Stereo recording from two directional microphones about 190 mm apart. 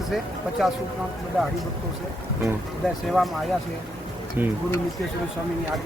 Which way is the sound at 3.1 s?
Centre (ahead or behind).